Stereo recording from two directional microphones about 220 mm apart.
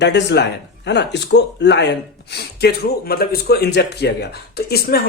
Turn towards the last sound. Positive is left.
turn(degrees=45)  # may be behind; listen again after turning